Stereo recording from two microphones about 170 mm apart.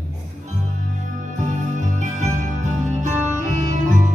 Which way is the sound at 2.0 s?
45° right (ahead or behind).